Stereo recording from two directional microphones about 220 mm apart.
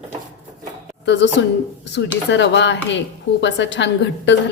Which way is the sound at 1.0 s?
55° left (ahead or behind).